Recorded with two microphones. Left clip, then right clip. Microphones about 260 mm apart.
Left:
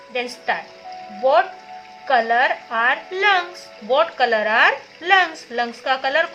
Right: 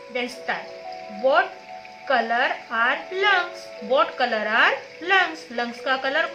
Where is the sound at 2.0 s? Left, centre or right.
Left.